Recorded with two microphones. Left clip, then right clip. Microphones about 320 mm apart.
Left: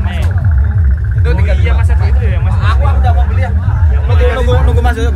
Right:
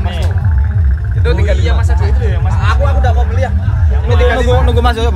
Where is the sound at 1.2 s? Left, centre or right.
Right.